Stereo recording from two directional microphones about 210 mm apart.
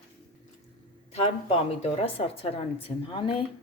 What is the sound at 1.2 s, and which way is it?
Speech, 30° left (ahead or behind).